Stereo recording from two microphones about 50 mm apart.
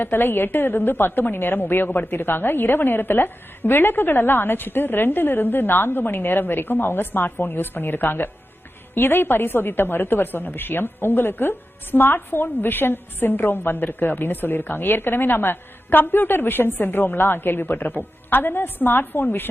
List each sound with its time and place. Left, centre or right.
0.0 s a woman's voice: left